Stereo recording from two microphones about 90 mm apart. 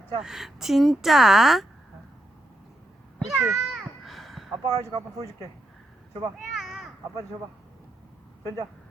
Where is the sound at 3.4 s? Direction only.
5° right (ahead or behind).